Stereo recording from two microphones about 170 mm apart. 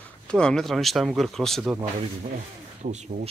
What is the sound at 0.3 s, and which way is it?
Speech, 5° left (ahead or behind).